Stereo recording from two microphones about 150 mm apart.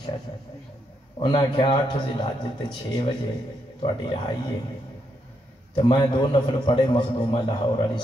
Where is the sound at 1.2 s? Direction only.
30° left (ahead or behind).